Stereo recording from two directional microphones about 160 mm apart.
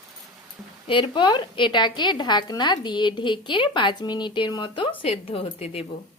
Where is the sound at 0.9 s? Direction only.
30° left (ahead or behind).